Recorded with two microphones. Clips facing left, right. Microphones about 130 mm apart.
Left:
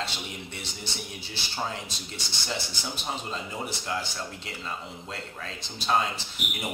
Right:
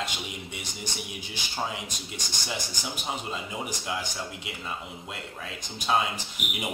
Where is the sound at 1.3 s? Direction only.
15° right (ahead or behind).